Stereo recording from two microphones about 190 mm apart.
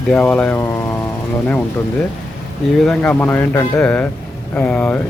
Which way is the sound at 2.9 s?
10° left (ahead or behind).